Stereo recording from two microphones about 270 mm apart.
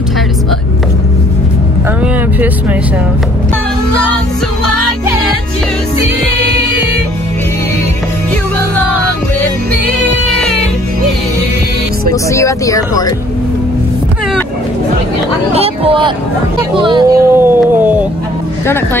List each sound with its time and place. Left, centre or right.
12.1 s speech: centre
15.5 s speech: right
16.7 s a sound: centre